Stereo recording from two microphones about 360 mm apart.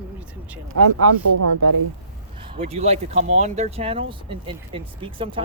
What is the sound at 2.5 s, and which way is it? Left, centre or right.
Speech, centre.